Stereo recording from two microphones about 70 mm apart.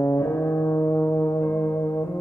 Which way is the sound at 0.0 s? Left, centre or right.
Left.